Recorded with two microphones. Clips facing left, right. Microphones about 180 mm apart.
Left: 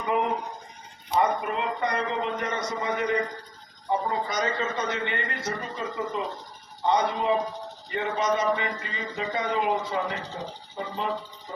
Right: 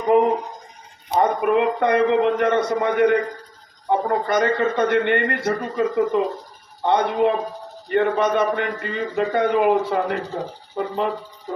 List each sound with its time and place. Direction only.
0.0 s speech: 40° right (ahead or behind)
1.1 s a man's voice: 55° right (ahead or behind)